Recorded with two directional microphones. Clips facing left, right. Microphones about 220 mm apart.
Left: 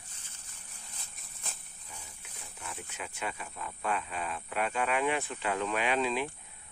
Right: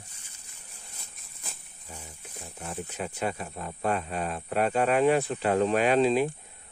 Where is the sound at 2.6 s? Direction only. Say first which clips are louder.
Right 8 dB; 35° right (ahead or behind).